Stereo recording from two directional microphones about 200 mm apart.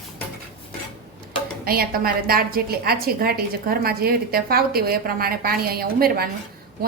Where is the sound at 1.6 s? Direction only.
50° right (ahead or behind).